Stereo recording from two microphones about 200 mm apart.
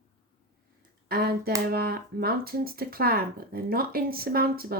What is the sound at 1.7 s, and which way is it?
Speech, 50° right (ahead or behind).